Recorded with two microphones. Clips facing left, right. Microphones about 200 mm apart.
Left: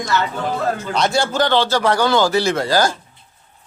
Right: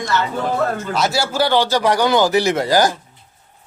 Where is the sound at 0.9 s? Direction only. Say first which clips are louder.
Left 1 dB; 5° right (ahead or behind).